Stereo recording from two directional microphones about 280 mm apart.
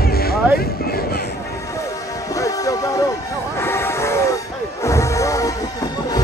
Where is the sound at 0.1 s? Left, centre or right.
Left.